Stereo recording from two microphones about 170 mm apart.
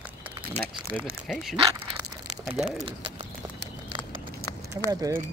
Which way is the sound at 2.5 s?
Centre (ahead or behind).